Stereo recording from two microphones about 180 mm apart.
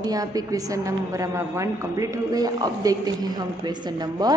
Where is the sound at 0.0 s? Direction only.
20° right (ahead or behind).